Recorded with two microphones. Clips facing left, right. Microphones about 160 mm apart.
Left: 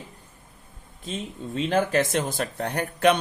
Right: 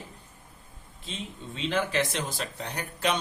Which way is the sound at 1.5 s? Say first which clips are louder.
Left 5 dB; 45° left (ahead or behind).